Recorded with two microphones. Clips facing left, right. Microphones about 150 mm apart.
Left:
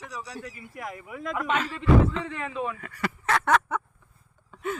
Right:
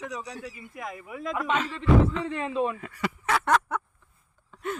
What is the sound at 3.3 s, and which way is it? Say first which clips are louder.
Speech: left 1 dB; centre (ahead or behind).